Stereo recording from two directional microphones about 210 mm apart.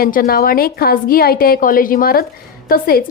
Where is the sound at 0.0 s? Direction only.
45° left (ahead or behind).